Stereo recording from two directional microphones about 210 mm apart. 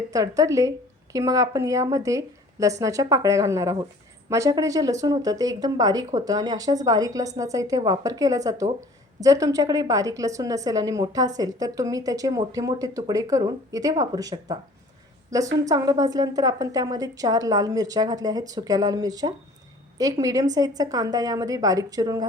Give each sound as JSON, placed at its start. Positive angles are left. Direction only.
{"t": 0.1, "sound": "a woman's voice", "side_deg": -15}